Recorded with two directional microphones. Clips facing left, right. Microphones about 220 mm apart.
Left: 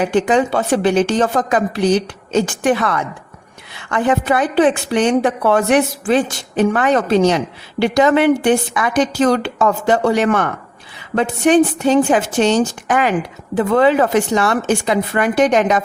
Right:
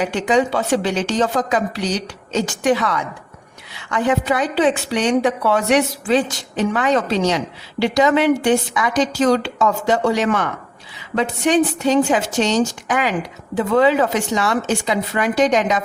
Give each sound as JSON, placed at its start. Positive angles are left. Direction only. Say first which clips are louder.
{"t": 0.0, "sound": "a woman's voice", "louder": "left 3 dB", "side_deg": 55}